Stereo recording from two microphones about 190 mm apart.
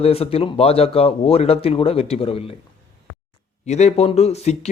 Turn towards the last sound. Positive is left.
turn(degrees=35)  # may be behind; listen again after turning